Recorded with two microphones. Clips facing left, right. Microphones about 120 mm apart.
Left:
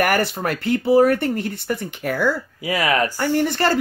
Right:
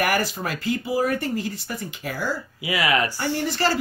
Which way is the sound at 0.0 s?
55° left (ahead or behind).